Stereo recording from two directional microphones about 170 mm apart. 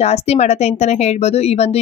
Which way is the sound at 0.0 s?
40° left (ahead or behind).